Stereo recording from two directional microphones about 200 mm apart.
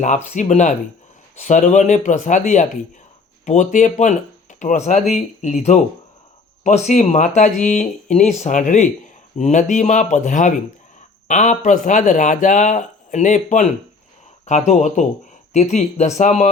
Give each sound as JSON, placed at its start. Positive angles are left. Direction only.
{"t": 0.0, "sound": "speech", "side_deg": 35}